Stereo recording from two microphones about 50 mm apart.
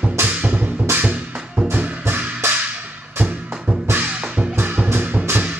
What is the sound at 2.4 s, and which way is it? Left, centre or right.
Music, right.